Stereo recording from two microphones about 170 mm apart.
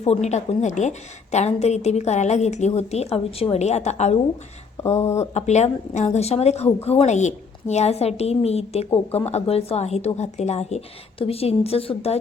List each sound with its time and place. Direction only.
0.0 s a woman's voice: 40° left (ahead or behind)